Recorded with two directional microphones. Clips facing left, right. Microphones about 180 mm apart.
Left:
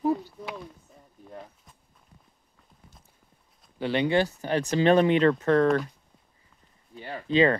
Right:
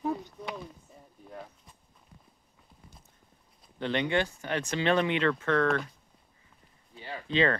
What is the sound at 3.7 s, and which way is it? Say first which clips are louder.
Speech: left 4 dB; 10° left (ahead or behind).